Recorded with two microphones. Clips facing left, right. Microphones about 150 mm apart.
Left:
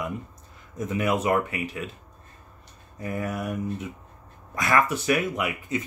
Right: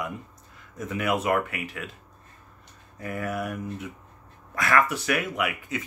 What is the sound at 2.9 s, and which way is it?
Speech, 20° left (ahead or behind).